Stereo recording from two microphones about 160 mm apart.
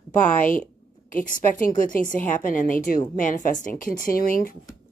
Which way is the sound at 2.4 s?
55° left (ahead or behind).